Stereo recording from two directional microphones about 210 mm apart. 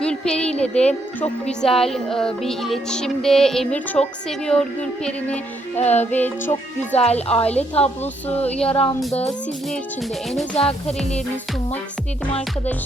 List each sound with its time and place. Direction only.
0.0 s speech: 5° left (ahead or behind)
1.5 s music: centre (ahead or behind)
5.7 s music: 30° left (ahead or behind)
6.1 s music: 10° left (ahead or behind)
7.0 s a woman's voice: 30° left (ahead or behind)
8.4 s music: 5° left (ahead or behind)